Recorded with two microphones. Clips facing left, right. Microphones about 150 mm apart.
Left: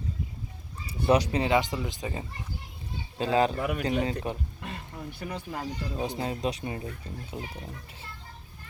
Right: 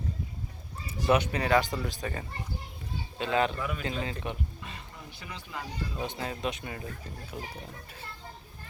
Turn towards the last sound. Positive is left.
turn(degrees=25)  # may be behind; listen again after turning